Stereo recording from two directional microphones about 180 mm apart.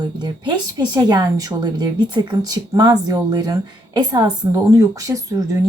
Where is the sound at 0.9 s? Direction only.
20° right (ahead or behind).